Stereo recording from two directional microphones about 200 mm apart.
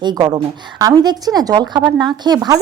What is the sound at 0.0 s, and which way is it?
A woman's voice, 20° right (ahead or behind).